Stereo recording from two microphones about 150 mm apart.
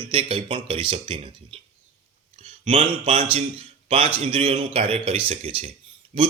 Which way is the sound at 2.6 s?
40° right (ahead or behind).